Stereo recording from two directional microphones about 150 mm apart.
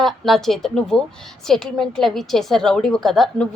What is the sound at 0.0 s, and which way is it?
A woman's voice, centre (ahead or behind).